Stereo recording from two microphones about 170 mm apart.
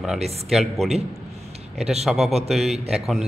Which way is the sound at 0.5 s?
Centre (ahead or behind).